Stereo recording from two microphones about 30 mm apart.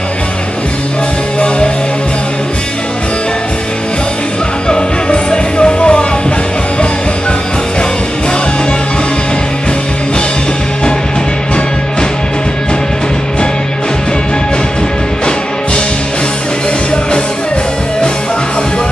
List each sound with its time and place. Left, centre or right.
4.6 s music: left